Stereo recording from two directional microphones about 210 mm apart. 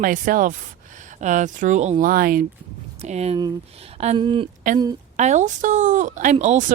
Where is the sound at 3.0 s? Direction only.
30° right (ahead or behind).